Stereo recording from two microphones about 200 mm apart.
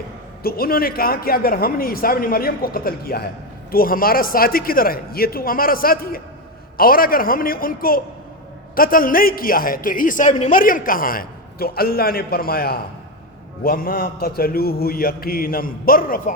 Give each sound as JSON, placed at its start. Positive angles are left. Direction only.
{"t": 0.4, "sound": "a man's voice", "side_deg": 50}